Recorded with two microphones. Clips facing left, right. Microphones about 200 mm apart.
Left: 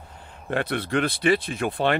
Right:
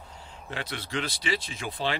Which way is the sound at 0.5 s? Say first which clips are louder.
Left 10 dB; 55° left (ahead or behind).